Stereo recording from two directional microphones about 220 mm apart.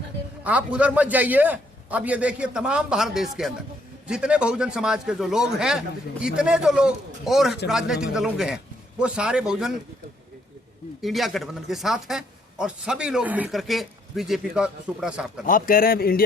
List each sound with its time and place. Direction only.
0.4 s a man's voice: 5° right (ahead or behind)
11.0 s a man's voice: centre (ahead or behind)
15.4 s a man's voice: 40° left (ahead or behind)